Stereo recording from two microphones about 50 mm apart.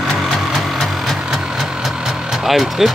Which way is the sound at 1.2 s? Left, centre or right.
Centre.